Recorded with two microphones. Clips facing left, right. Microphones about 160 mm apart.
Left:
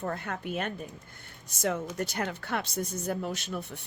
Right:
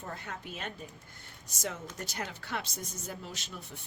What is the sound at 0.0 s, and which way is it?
Speech, 60° left (ahead or behind).